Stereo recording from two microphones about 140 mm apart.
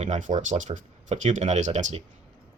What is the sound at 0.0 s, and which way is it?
Speech, 60° right (ahead or behind).